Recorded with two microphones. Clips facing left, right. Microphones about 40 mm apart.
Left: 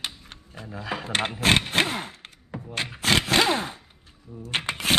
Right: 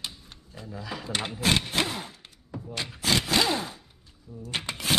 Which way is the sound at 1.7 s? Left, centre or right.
Left.